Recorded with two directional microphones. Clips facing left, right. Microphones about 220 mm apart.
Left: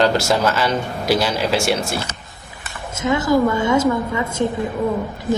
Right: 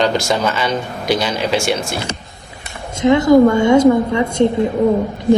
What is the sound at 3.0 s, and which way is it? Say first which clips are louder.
A woman's voice: right 7 dB; 25° right (ahead or behind).